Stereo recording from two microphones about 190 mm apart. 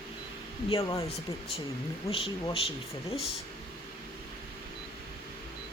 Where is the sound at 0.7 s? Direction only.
25° left (ahead or behind).